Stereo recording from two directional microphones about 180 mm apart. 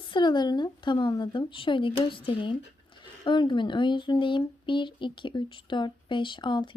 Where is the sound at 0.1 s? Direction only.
25° left (ahead or behind).